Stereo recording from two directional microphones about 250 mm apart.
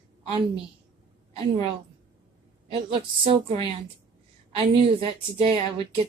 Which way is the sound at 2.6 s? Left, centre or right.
Right.